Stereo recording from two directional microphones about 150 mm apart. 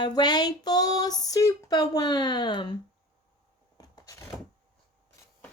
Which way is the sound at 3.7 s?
25° left (ahead or behind).